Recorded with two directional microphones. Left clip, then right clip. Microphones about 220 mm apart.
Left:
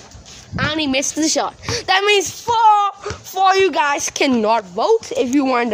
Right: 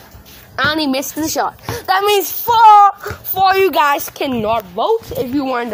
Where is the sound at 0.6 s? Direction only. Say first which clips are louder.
Right 4 dB; 25° right (ahead or behind).